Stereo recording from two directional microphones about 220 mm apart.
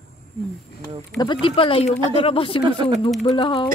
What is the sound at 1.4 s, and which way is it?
Speech, 25° left (ahead or behind).